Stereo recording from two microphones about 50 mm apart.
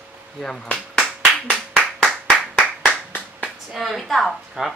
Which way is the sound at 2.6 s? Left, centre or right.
Left.